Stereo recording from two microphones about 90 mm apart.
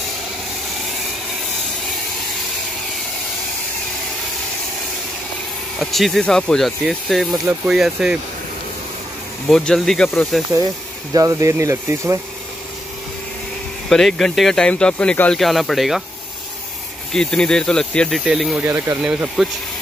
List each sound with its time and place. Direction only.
5.8 s speech: centre (ahead or behind)
9.5 s speech: 10° left (ahead or behind)
11.1 s speech: 35° right (ahead or behind)
13.8 s speech: 5° left (ahead or behind)
15.3 s speech: centre (ahead or behind)
17.1 s speech: 5° left (ahead or behind)
18.2 s speech: 5° right (ahead or behind)
18.6 s speech: 25° right (ahead or behind)
19.0 s speech: 15° right (ahead or behind)